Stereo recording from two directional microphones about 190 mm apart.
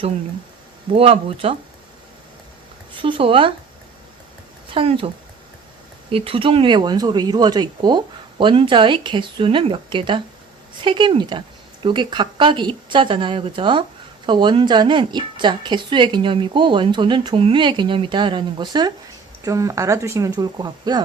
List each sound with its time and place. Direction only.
0.9 s speech: 30° right (ahead or behind)
2.9 s speech: 25° right (ahead or behind)
4.7 s a woman's voice: 30° right (ahead or behind)